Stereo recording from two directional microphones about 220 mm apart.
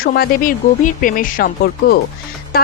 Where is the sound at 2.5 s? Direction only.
45° left (ahead or behind).